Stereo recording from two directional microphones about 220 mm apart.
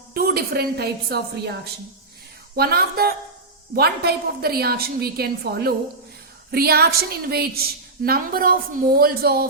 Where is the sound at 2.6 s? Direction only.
45° right (ahead or behind).